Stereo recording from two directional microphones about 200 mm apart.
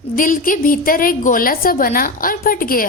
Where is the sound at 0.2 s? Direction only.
45° left (ahead or behind).